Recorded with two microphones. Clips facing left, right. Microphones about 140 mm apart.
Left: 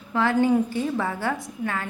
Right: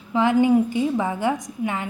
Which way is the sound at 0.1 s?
15° right (ahead or behind).